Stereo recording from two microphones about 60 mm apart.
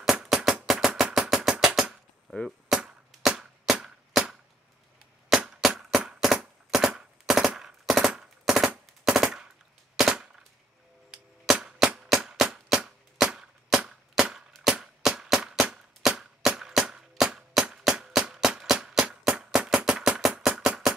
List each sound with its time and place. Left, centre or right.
0.1 s a sound: centre
0.7 s music: centre
2.3 s cap gun: centre
2.7 s a sound: centre
3.2 s chop: centre
5.3 s chop: centre
5.8 s machine gun: centre
10.0 s cap gun: centre
11.6 s music: centre
14.6 s a sound: centre